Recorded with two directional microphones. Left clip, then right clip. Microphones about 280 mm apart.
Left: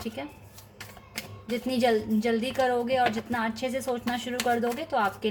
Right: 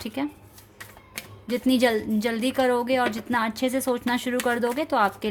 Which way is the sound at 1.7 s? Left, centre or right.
Right.